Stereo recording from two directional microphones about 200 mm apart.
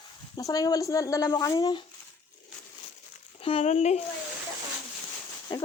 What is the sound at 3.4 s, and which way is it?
Speech, 30° left (ahead or behind).